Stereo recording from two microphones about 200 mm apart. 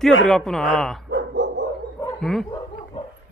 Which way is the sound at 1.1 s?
60° right (ahead or behind).